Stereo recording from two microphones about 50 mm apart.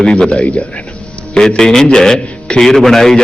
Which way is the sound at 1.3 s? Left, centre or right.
Centre.